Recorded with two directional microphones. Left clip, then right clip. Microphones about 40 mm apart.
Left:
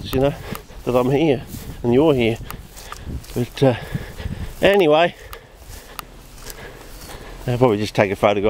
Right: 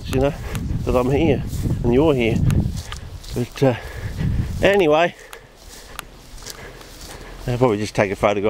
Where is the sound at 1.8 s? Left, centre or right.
Centre.